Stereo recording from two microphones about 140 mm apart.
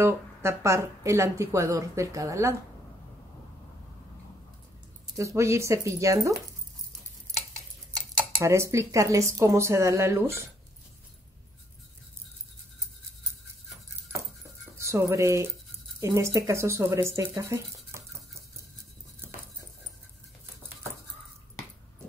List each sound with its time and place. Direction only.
0.0 s speech: 20° right (ahead or behind)
5.1 s speech: 20° right (ahead or behind)
7.9 s speech: 20° right (ahead or behind)
14.8 s speech: 20° right (ahead or behind)
17.4 s a sound: 20° right (ahead or behind)